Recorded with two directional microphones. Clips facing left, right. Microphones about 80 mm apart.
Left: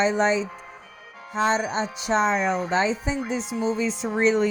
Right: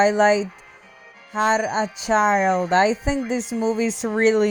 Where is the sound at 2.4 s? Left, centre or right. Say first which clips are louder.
Right 5 dB; right.